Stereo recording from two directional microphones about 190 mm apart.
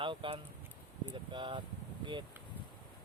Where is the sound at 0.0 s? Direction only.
25° right (ahead or behind).